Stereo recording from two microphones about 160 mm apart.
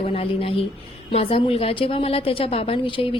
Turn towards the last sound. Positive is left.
turn(degrees=35)  # may be behind; listen again after turning